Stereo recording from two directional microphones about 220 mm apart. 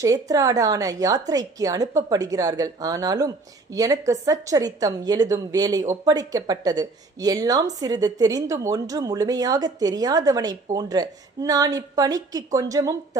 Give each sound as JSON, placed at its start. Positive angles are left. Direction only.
{"t": 0.0, "sound": "speech", "side_deg": -15}